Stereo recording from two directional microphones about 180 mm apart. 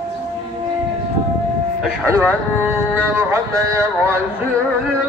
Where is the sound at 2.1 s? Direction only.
15° right (ahead or behind).